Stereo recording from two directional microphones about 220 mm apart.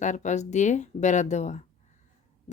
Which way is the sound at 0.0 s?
35° left (ahead or behind).